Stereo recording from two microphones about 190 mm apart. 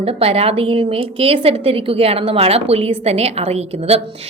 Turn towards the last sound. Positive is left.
turn(degrees=-35)  # may be behind; listen again after turning